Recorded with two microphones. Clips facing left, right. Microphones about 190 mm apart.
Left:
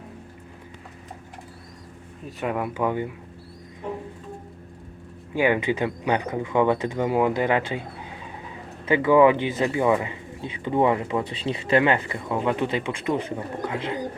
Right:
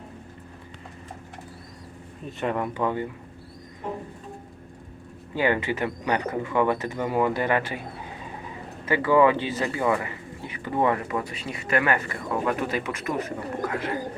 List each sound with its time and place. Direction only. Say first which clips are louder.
2.4 s speech: left 1 dB; 5° left (ahead or behind)
5.3 s speech: left 3 dB; 15° left (ahead or behind)
8.9 s speech: left 3 dB; 15° left (ahead or behind)